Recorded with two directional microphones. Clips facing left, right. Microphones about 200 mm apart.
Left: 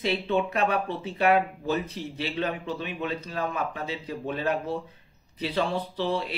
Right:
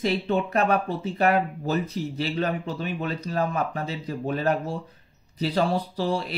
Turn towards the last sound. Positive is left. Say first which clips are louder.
# right 2 dB
turn(degrees=-40)  # may be behind; listen again after turning